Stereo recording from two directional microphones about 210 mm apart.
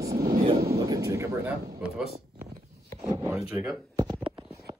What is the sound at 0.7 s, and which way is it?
Speech, 15° right (ahead or behind).